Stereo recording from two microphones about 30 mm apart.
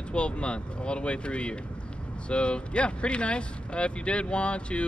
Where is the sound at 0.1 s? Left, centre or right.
Left.